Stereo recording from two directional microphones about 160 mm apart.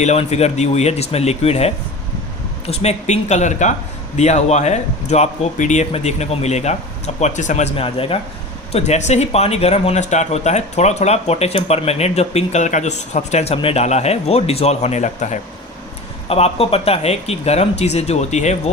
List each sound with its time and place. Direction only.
0.0 s speech: 45° left (ahead or behind)